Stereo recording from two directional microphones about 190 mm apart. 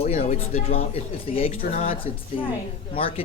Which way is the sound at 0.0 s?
35° left (ahead or behind).